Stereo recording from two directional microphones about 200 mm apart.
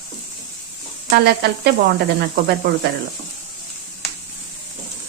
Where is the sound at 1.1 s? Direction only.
55° right (ahead or behind).